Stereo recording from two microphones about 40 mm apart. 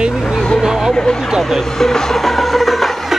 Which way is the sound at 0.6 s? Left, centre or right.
Centre.